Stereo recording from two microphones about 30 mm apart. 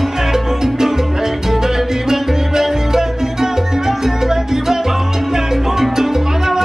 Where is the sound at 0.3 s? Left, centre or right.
Centre.